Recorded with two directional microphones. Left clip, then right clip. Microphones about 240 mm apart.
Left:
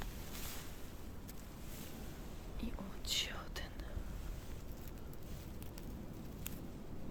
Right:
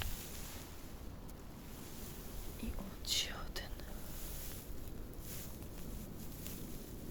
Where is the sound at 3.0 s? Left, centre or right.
Centre.